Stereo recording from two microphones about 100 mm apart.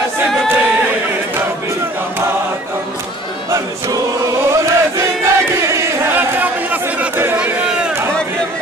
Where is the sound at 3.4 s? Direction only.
35° right (ahead or behind).